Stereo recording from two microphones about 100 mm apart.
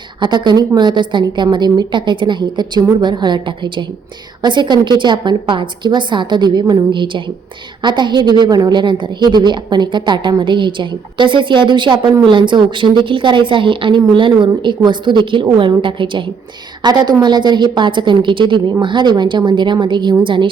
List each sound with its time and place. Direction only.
0.2 s a woman's voice: 50° right (ahead or behind)
16.8 s a woman's voice: 45° right (ahead or behind)